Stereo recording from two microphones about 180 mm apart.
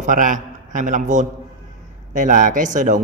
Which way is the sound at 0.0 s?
45° right (ahead or behind).